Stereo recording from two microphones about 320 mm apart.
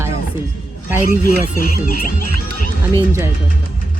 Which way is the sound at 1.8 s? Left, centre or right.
Left.